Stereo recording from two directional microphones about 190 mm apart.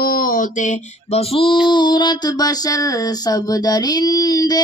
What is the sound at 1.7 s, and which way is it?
Female singing, 25° left (ahead or behind).